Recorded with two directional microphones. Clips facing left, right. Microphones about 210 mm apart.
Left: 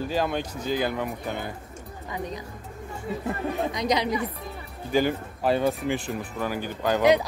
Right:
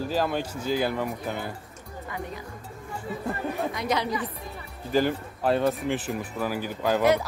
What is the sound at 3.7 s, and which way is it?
Speech, 15° left (ahead or behind).